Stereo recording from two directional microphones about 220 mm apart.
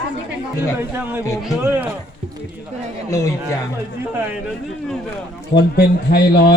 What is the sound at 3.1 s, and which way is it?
Speech, 15° left (ahead or behind).